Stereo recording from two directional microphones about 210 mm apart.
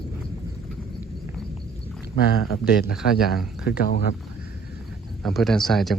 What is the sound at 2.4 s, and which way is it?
Speech, 45° left (ahead or behind).